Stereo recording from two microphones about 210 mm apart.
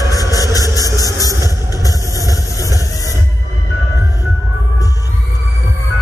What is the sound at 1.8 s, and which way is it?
Vehicle, 15° left (ahead or behind).